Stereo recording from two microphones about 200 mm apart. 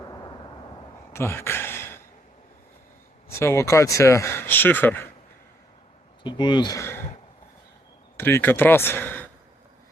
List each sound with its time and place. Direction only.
1.1 s speech: 10° left (ahead or behind)
3.2 s speech: 15° left (ahead or behind)
6.2 s speech: 20° left (ahead or behind)
8.1 s speech: 10° left (ahead or behind)